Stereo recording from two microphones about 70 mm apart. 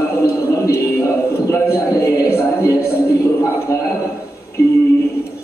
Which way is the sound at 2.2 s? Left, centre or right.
Left.